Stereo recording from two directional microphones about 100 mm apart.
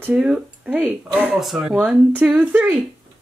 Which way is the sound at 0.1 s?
10° right (ahead or behind).